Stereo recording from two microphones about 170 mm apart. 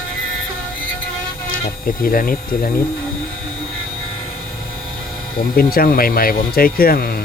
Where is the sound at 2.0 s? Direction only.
60° left (ahead or behind).